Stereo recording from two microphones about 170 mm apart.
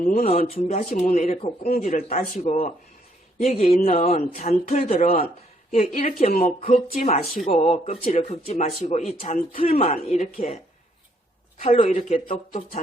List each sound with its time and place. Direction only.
0.0 s speech: 50° left (ahead or behind)
8.0 s speech: 50° left (ahead or behind)
11.6 s speech: 40° left (ahead or behind)